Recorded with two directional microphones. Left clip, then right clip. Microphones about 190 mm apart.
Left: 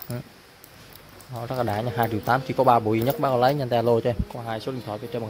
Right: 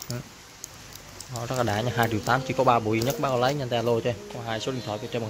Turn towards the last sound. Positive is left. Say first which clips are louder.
# even
turn(degrees=10)  # may be behind; listen again after turning